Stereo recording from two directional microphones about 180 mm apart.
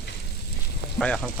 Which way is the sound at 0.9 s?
5° left (ahead or behind).